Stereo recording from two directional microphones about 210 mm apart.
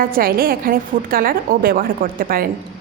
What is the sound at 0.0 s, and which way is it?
A woman's voice, 45° right (ahead or behind).